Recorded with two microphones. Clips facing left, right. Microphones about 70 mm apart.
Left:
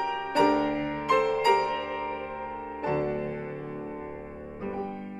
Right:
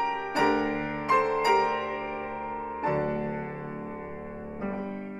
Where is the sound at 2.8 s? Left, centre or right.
Right.